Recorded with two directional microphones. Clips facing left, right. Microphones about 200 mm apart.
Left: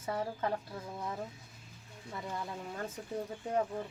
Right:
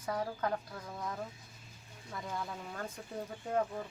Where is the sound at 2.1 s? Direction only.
5° left (ahead or behind).